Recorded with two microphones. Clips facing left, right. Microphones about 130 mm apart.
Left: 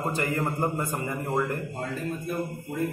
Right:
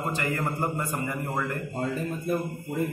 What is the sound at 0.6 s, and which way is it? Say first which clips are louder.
Speech: left 1 dB; centre (ahead or behind).